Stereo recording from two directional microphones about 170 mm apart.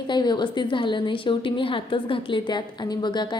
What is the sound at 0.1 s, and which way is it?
A woman's voice, 25° left (ahead or behind).